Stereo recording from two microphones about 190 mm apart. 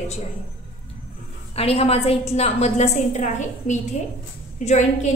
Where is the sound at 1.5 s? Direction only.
30° left (ahead or behind).